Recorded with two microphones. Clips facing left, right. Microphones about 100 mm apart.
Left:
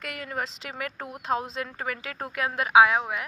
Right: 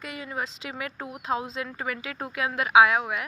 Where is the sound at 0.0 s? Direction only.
60° left (ahead or behind).